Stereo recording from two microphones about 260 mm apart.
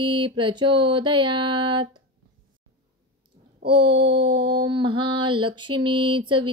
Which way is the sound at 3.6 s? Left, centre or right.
Centre.